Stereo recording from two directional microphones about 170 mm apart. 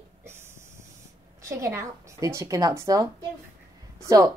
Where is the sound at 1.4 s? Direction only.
15° right (ahead or behind).